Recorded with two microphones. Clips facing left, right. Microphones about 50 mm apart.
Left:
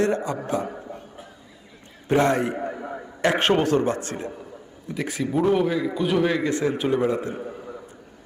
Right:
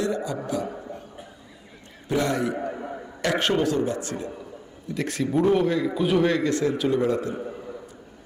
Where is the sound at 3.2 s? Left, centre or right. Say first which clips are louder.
Left 3 dB; left.